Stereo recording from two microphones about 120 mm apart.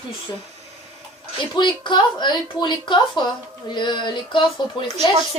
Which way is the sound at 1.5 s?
40° left (ahead or behind).